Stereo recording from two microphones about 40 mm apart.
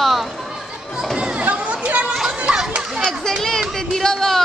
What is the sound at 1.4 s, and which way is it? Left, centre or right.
Chatter, right.